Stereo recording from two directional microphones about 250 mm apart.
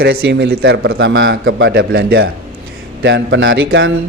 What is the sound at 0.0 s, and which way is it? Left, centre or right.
A man's voice, right.